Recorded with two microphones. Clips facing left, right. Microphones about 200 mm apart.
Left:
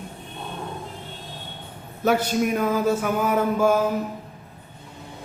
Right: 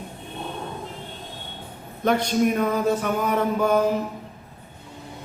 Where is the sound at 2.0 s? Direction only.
5° left (ahead or behind).